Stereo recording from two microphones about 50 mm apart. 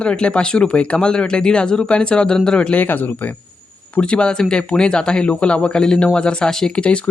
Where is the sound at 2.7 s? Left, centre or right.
Left.